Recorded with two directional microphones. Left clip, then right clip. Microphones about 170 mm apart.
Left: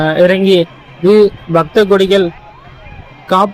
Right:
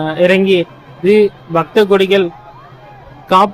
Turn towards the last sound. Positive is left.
turn(degrees=20)  # may be behind; listen again after turning